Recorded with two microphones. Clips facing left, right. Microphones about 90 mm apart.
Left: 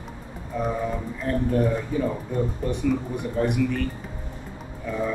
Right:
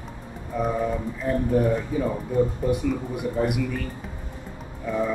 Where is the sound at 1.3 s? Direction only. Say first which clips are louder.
Right 1 dB; 5° right (ahead or behind).